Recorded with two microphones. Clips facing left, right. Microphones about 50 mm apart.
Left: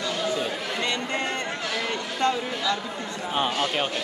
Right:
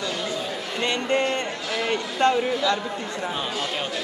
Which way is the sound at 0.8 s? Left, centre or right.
Right.